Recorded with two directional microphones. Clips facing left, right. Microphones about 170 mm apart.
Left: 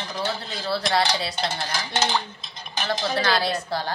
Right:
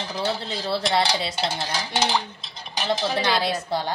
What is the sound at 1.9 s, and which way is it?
A woman's voice, 10° right (ahead or behind).